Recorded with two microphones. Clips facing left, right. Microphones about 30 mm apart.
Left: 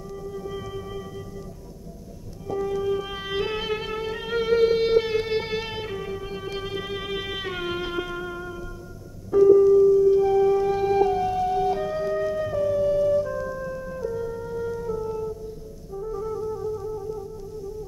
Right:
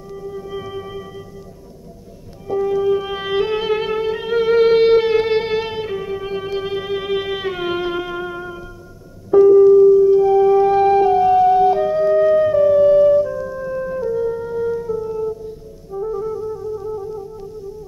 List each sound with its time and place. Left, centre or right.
0.1 s music: centre
2.4 s music: centre
4.6 s music: right; by 6.1 s centre
6.1 s music: right
10.6 s music: right
13.1 s music: centre
13.7 s music: right; by 16.8 s centre
16.8 s music: centre